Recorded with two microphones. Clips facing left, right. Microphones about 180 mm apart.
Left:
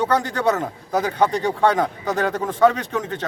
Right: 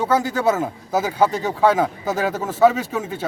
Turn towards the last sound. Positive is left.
turn(degrees=-5)  # may be behind; listen again after turning